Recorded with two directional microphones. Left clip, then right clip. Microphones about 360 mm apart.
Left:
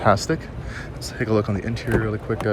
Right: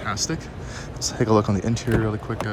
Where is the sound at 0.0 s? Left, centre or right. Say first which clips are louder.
Left 8 dB; centre.